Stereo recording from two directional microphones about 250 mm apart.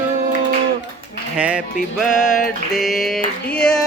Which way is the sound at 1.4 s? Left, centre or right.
Centre.